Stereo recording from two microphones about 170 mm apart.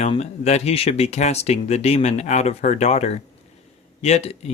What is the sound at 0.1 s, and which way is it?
Speech, 40° left (ahead or behind).